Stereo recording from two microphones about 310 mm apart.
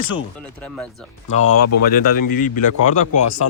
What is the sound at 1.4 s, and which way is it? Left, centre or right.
Speech, left.